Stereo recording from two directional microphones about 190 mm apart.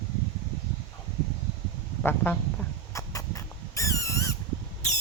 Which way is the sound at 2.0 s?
10° left (ahead or behind).